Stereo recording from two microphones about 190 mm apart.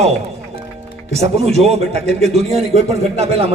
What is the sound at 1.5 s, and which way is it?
A man's voice, 35° right (ahead or behind).